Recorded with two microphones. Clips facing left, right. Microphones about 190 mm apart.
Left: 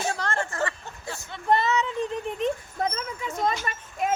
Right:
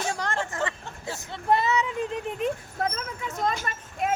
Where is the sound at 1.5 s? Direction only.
10° right (ahead or behind).